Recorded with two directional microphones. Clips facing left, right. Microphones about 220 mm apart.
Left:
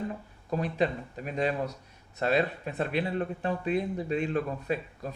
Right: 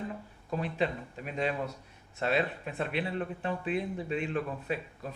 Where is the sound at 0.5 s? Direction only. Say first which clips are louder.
Left 3 dB; 40° left (ahead or behind).